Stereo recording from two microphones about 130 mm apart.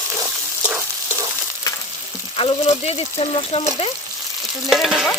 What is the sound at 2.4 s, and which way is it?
Speech, 50° left (ahead or behind).